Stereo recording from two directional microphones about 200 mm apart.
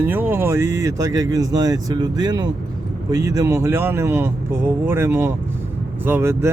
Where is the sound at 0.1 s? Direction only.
10° right (ahead or behind).